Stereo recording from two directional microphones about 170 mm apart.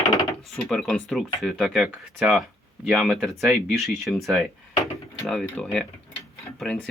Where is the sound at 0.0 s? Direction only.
20° left (ahead or behind).